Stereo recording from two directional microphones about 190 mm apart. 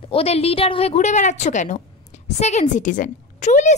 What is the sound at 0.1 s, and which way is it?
A woman's voice, 30° left (ahead or behind).